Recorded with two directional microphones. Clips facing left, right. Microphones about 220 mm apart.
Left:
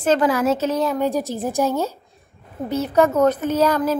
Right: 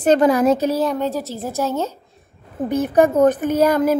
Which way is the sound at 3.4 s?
10° right (ahead or behind).